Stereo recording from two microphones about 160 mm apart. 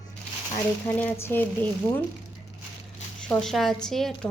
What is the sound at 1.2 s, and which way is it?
Speech, 15° left (ahead or behind).